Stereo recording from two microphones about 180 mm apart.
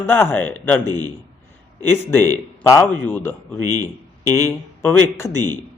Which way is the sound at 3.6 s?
20° right (ahead or behind).